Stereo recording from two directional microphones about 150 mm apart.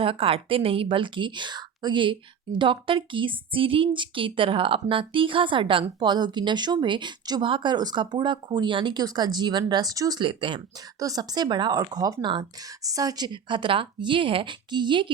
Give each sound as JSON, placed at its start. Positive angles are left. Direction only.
{"t": 0.0, "sound": "a woman's voice", "side_deg": -40}